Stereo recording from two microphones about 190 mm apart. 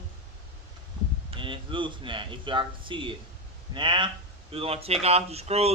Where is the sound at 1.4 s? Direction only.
25° right (ahead or behind).